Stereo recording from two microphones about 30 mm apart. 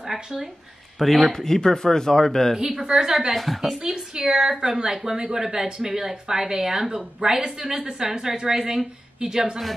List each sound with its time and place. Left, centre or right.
0.0 s a sound: centre
0.9 s speech: centre
1.3 s speech: centre
2.5 s speech: centre
2.8 s a woman's voice: right
3.3 s speech: centre
3.6 s a woman's voice: centre